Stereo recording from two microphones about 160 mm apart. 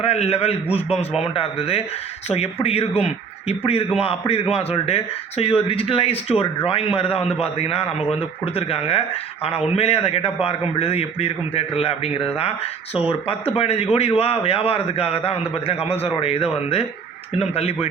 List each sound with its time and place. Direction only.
0.0 s a man's voice: 40° left (ahead or behind)